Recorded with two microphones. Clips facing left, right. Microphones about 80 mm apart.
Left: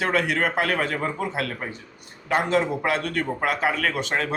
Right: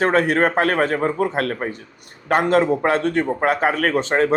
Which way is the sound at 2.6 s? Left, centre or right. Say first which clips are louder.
Right 7 dB; right.